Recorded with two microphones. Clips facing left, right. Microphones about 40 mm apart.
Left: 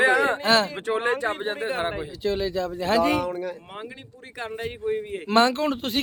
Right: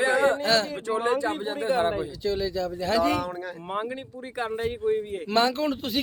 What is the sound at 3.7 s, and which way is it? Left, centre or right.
Speech, centre.